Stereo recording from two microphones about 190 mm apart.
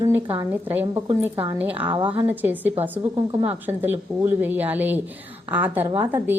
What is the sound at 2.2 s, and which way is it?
Speech, 10° right (ahead or behind).